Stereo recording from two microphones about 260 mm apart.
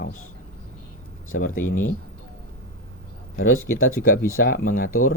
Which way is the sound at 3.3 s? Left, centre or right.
Left.